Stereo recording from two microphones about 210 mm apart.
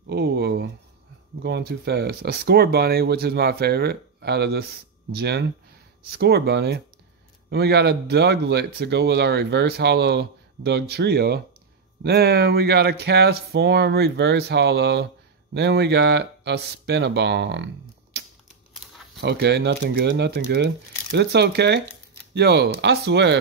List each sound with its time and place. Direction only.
0.0 s a sound: 50° right (ahead or behind)
1.4 s speech: 50° right (ahead or behind)
19.2 s speech: 55° right (ahead or behind)